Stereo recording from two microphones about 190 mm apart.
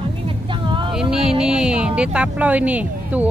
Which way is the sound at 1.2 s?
30° right (ahead or behind).